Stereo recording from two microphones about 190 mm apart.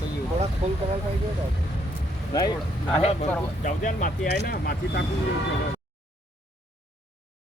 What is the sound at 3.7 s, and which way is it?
Speech, 45° left (ahead or behind).